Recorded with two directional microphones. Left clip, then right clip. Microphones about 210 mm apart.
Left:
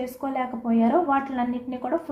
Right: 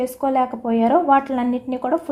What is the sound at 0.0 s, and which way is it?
A woman's voice, 50° right (ahead or behind).